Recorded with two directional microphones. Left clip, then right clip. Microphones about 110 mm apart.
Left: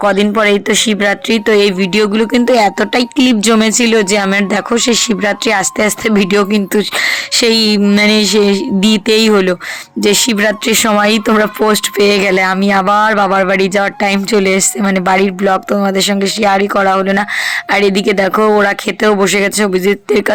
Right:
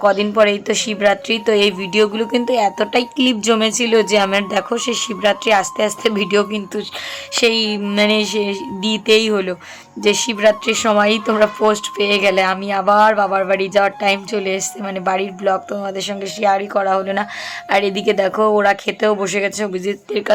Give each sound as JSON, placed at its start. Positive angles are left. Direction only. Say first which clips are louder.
{"t": 0.0, "sound": "speech", "louder": "left 2 dB", "side_deg": 45}
{"t": 6.7, "sound": "speech", "louder": "left 12 dB", "side_deg": 60}
{"t": 20.1, "sound": "speech", "louder": "left 8 dB", "side_deg": 65}